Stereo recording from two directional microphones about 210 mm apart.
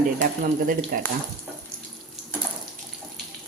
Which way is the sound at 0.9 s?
45° right (ahead or behind).